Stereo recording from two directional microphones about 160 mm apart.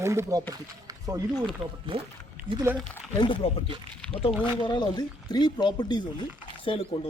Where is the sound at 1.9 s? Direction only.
35° right (ahead or behind).